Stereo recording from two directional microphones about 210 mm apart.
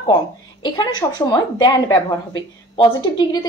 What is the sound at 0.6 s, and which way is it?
A woman's voice, 20° left (ahead or behind).